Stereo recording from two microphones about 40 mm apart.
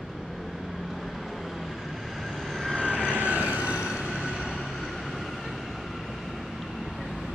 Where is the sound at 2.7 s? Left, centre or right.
Centre.